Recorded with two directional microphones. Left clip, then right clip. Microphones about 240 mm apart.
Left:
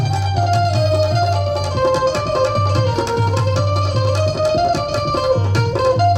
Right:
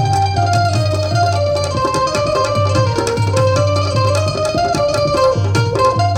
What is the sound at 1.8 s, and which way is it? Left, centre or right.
Music, right.